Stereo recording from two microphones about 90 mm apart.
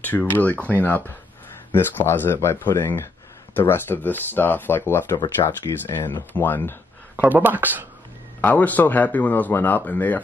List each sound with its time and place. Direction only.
0.0 s a man's voice: 20° left (ahead or behind)
7.2 s speech: 20° right (ahead or behind)
8.4 s a man's voice: 20° left (ahead or behind)